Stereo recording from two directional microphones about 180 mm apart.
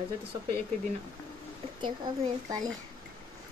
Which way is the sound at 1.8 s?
25° right (ahead or behind).